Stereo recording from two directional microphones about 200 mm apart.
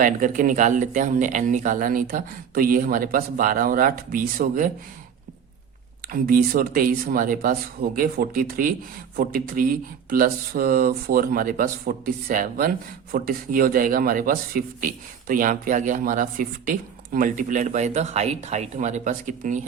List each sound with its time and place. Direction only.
0.0 s speech: 40° right (ahead or behind)
6.1 s speech: 45° right (ahead or behind)